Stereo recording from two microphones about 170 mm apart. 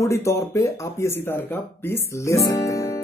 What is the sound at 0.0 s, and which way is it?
Speech, 15° left (ahead or behind).